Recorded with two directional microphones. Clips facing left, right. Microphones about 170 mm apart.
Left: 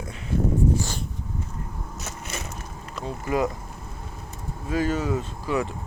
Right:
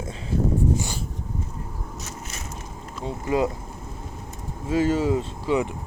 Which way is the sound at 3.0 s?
20° right (ahead or behind).